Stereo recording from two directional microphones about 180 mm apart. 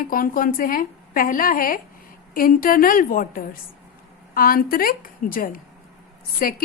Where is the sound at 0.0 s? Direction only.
50° left (ahead or behind).